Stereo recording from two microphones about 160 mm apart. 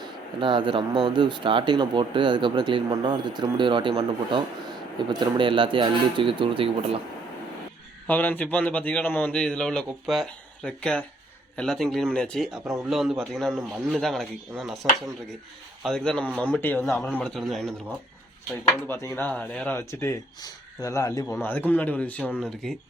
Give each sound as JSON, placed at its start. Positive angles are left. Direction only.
{"t": 0.0, "sound": "speech", "side_deg": -30}
{"t": 8.0, "sound": "a man's voice", "side_deg": 10}
{"t": 15.8, "sound": "a man's voice", "side_deg": 5}
{"t": 18.9, "sound": "a man's voice", "side_deg": 10}